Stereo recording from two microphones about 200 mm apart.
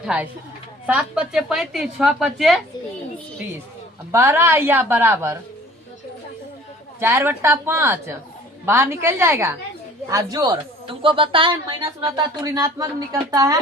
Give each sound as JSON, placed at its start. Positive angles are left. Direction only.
{"t": 0.0, "sound": "a woman's voice", "side_deg": -5}
{"t": 4.1, "sound": "speech", "side_deg": -10}
{"t": 7.0, "sound": "a woman's voice", "side_deg": -10}